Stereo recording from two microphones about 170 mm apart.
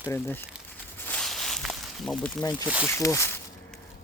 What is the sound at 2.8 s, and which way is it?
Speech, 15° left (ahead or behind).